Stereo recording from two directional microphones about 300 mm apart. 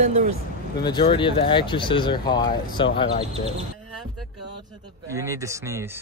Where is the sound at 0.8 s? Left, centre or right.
Centre.